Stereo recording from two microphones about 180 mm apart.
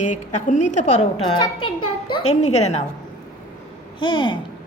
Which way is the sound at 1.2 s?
25° left (ahead or behind).